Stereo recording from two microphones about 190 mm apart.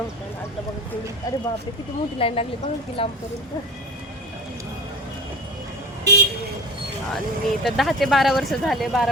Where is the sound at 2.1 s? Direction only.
30° left (ahead or behind).